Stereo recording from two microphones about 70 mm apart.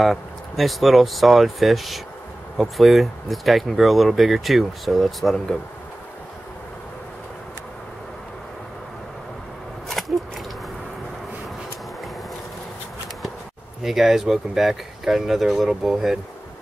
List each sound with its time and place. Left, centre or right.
0.0 s speech: centre
10.0 s a sound: centre
13.8 s speech: centre